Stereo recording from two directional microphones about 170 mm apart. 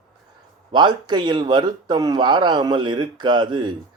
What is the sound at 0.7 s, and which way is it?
Speech, 25° right (ahead or behind).